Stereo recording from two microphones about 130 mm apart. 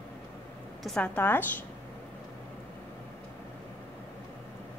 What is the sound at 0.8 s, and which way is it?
Speech, 5° left (ahead or behind).